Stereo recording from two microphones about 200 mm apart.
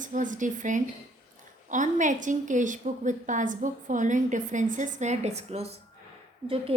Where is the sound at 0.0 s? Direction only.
40° right (ahead or behind).